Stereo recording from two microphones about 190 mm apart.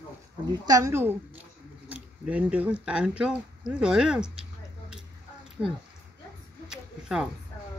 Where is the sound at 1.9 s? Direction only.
10° right (ahead or behind).